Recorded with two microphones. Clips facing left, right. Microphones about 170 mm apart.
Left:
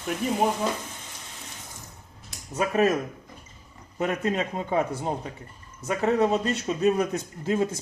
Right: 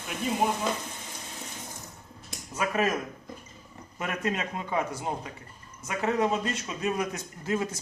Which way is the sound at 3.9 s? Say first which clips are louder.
Left 5 dB; 35° left (ahead or behind).